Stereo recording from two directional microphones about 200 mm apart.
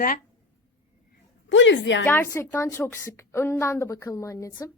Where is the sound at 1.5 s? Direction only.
65° left (ahead or behind).